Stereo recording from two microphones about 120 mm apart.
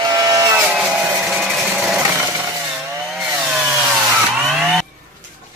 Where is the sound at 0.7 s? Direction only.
5° right (ahead or behind).